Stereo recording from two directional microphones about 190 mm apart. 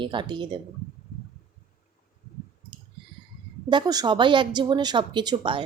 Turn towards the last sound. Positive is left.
turn(degrees=-25)  # may be behind; listen again after turning